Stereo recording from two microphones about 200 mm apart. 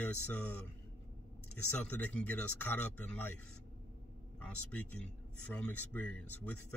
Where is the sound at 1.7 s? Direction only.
5° left (ahead or behind).